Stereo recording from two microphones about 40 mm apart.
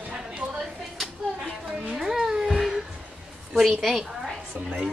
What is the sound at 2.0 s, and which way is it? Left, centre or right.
Babbling, centre.